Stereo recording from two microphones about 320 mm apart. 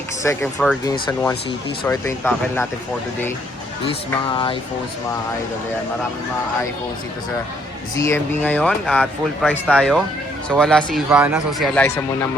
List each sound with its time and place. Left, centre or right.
0.2 s speech: centre
7.9 s speech: centre